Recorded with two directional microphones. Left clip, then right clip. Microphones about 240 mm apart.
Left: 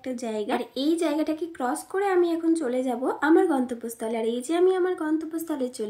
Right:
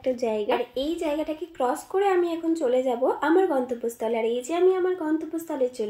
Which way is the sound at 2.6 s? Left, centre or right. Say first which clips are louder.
Right 4 dB; left.